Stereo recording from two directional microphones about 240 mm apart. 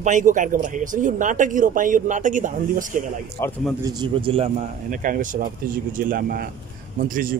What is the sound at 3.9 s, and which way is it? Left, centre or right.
Speech, centre.